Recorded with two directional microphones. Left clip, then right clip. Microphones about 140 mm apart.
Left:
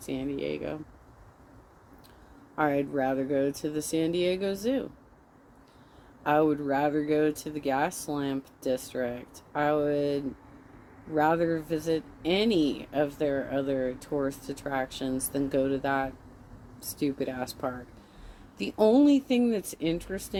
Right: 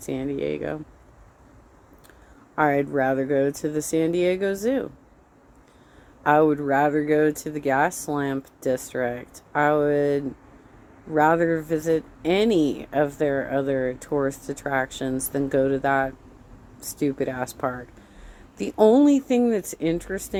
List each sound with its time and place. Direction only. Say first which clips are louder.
0.0 s speech: right 5 dB; 40° right (ahead or behind)
2.6 s speech: right 6 dB; 40° right (ahead or behind)
6.2 s speech: right 6 dB; 35° right (ahead or behind)